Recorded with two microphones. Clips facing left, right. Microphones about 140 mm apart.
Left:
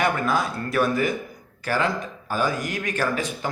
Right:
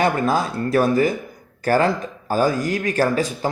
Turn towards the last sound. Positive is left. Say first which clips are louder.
# right 6 dB
turn(degrees=-35)  # may be behind; listen again after turning